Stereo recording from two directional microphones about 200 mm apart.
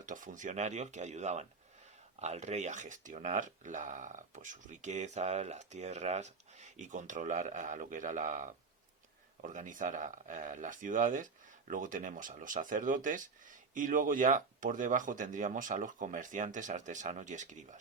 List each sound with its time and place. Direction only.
0.0 s speech: 40° right (ahead or behind)